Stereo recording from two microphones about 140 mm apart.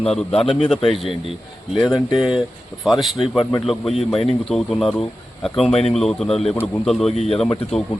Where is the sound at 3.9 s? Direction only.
45° left (ahead or behind).